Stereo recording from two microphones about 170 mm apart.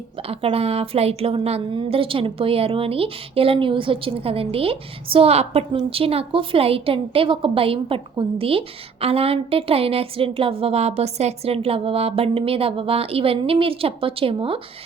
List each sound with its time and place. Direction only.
0.2 s a woman's voice: 35° right (ahead or behind)